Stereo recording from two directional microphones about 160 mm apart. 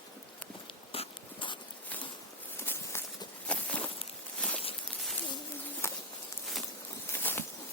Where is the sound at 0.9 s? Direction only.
35° left (ahead or behind).